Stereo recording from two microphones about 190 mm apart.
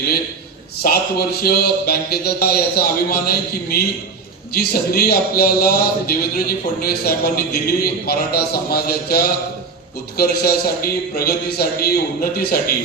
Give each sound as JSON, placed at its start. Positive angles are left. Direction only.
{"t": 0.8, "sound": "speech", "side_deg": 55}